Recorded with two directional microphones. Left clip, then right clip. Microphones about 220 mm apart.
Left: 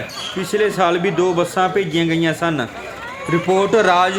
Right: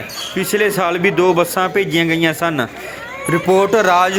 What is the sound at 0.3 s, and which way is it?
Speech, 15° right (ahead or behind).